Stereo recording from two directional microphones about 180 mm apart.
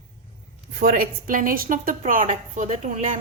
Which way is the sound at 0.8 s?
55° right (ahead or behind).